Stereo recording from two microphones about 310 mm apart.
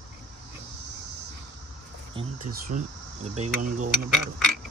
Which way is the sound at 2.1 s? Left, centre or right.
Right.